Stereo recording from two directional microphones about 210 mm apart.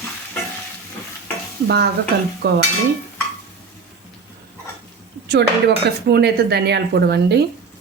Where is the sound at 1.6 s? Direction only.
50° right (ahead or behind).